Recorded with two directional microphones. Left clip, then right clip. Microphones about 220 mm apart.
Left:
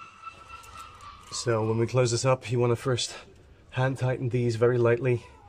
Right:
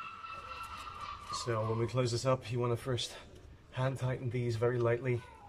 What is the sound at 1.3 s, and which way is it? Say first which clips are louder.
Speech: left 9 dB; 50° left (ahead or behind).